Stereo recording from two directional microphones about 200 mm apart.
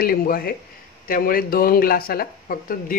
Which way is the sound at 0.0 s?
45° left (ahead or behind).